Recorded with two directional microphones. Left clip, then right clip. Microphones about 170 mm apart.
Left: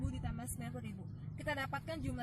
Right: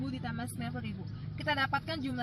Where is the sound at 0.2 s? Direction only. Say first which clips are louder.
Right 8 dB; 15° left (ahead or behind).